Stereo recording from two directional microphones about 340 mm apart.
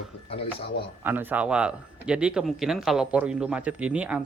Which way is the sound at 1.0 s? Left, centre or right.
Centre.